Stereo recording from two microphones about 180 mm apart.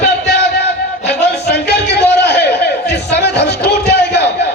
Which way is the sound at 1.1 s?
70° left (ahead or behind).